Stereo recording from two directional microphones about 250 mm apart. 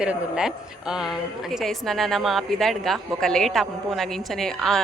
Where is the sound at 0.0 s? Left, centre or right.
Centre.